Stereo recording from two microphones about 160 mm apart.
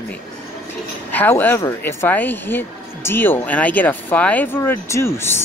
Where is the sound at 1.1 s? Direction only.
15° left (ahead or behind).